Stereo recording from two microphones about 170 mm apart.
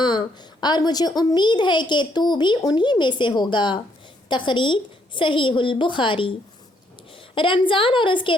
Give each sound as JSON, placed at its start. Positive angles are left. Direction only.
{"t": 0.0, "sound": "a child's voice", "side_deg": 25}